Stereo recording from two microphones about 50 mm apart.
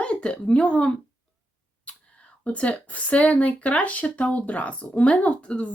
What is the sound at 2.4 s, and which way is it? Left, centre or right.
Speech, left.